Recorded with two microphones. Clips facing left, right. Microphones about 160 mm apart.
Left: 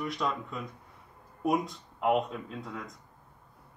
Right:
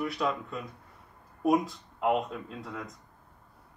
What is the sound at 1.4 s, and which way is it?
Speech, centre (ahead or behind).